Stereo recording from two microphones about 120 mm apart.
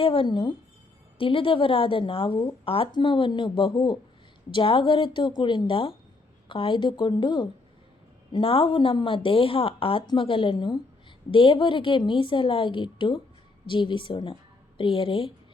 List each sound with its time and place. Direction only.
0.0 s a woman's voice: 50° left (ahead or behind)
8.3 s a woman's voice: 50° left (ahead or behind)